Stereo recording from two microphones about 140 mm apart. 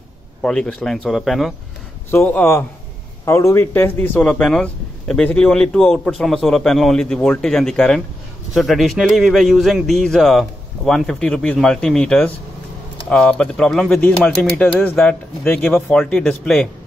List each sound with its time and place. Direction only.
0.4 s speech: 5° left (ahead or behind)
2.0 s speech: 15° left (ahead or behind)